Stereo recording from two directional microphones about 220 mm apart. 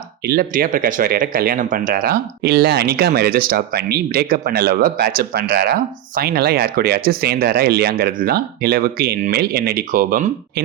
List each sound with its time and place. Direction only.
0.3 s speech: 45° right (ahead or behind)